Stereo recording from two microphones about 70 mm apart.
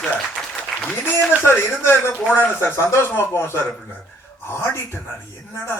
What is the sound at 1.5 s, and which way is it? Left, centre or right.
Speech, left.